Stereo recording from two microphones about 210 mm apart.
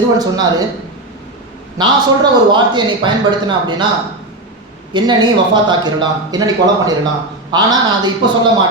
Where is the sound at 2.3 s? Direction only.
20° right (ahead or behind).